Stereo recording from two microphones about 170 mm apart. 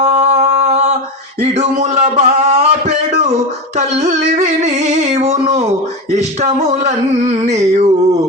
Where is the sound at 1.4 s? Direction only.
45° right (ahead or behind).